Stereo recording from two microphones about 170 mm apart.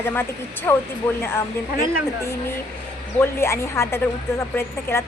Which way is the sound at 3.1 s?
15° left (ahead or behind).